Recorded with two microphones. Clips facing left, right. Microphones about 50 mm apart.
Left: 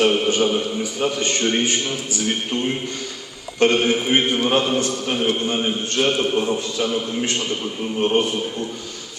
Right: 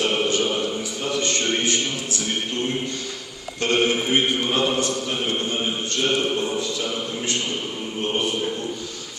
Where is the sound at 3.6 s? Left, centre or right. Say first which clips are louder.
Left 4 dB; left.